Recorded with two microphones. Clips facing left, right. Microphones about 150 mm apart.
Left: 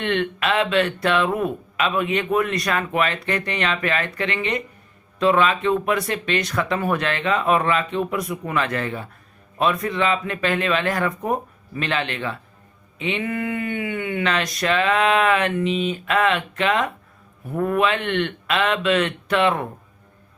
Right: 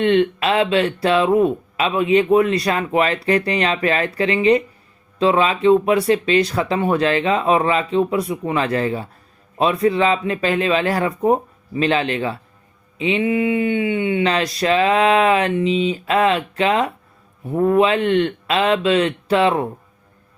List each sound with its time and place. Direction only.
0.0 s speech: 30° right (ahead or behind)